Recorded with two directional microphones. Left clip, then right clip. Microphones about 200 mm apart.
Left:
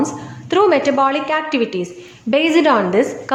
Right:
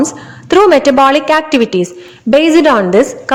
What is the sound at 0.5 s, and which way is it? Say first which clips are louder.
A woman's voice: right 7 dB; 35° right (ahead or behind).